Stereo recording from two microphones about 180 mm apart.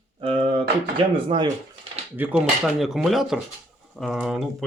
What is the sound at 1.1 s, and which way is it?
Speech, 25° right (ahead or behind).